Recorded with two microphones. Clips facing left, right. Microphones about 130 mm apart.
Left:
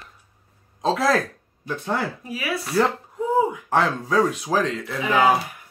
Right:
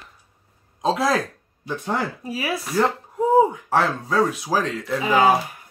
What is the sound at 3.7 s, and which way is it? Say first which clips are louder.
Speech: left 4 dB; 5° right (ahead or behind).